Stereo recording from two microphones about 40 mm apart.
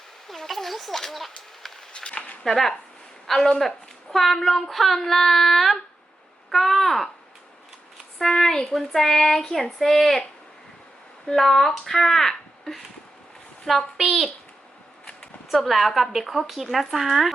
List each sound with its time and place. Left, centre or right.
0.3 s a sound: centre
1.9 s a sound: left
2.4 s a woman's voice: centre
8.2 s speech: centre
11.3 s speech: centre
13.7 s speech: centre
15.6 s speech: centre